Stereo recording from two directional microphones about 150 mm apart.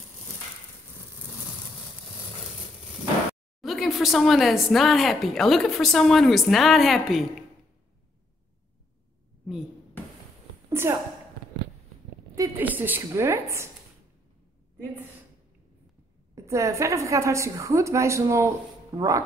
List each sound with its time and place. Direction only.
3.6 s speech: centre (ahead or behind)
10.7 s a sound: 15° right (ahead or behind)
12.5 s a woman's voice: 10° right (ahead or behind)
16.3 s a woman's voice: 20° right (ahead or behind)